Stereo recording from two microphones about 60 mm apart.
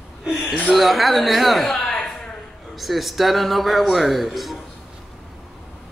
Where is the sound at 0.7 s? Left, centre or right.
Centre.